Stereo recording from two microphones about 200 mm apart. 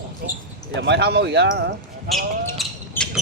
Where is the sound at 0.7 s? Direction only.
60° right (ahead or behind).